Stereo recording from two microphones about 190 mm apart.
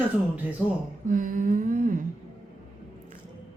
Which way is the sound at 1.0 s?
45° right (ahead or behind).